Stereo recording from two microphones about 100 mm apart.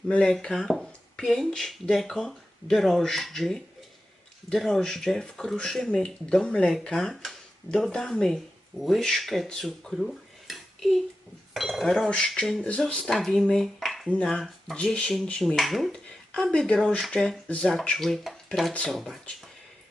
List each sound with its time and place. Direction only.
0.1 s speech: 10° left (ahead or behind)